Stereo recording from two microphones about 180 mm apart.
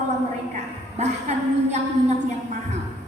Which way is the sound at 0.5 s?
40° right (ahead or behind).